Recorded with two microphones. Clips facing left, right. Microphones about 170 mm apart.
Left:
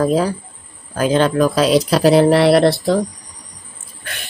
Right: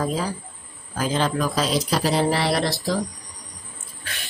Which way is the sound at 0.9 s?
65° left (ahead or behind).